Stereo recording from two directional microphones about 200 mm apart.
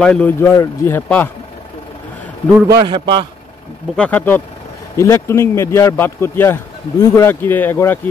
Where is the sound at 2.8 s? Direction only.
25° right (ahead or behind).